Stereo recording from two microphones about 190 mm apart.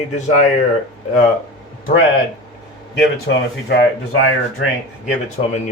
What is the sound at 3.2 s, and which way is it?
Speech, 70° left (ahead or behind).